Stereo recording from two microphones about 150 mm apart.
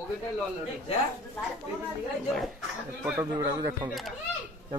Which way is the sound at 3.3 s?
25° right (ahead or behind).